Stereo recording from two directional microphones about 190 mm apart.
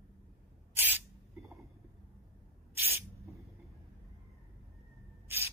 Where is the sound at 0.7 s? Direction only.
10° right (ahead or behind).